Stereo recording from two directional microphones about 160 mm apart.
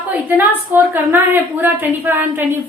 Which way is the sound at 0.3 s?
10° right (ahead or behind).